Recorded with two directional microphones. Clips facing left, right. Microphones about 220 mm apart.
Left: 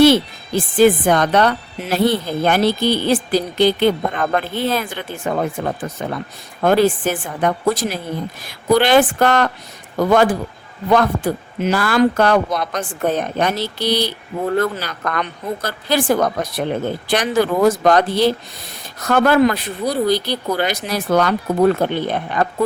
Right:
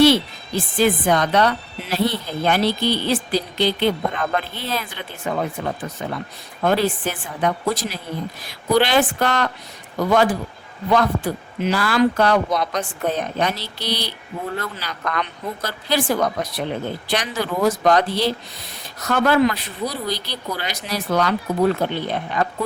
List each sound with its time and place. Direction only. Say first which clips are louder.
0.0 s speech: left 3 dB; 50° left (ahead or behind)
6.6 s speech: left 5 dB; 50° left (ahead or behind)